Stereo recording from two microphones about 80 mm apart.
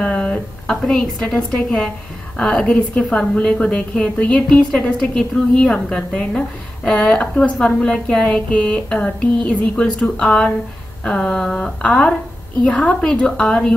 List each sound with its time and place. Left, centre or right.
0.0 s a woman's voice: centre